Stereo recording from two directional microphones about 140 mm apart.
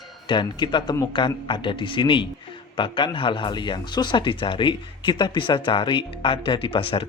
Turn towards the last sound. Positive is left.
turn(degrees=40)  # may be behind; listen again after turning